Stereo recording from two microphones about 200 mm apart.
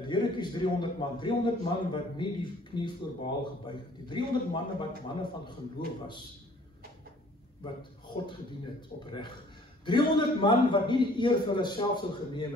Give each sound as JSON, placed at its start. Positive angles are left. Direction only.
{"t": 0.0, "sound": "a man's voice", "side_deg": 25}
{"t": 9.0, "sound": "a man's voice", "side_deg": 25}